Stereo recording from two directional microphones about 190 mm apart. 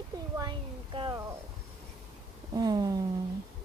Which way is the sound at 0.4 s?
25° right (ahead or behind).